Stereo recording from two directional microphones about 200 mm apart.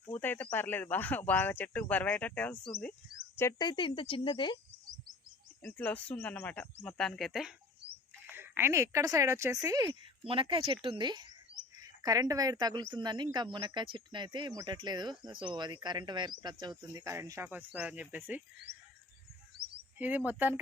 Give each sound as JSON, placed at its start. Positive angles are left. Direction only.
{"t": 0.1, "sound": "speech", "side_deg": 10}
{"t": 3.3, "sound": "speech", "side_deg": 15}
{"t": 5.6, "sound": "speech", "side_deg": 10}
{"t": 19.5, "sound": "bird vocalization", "side_deg": -55}
{"t": 20.0, "sound": "speech", "side_deg": -10}